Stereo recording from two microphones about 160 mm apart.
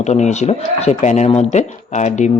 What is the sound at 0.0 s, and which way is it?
A man's voice, 45° left (ahead or behind).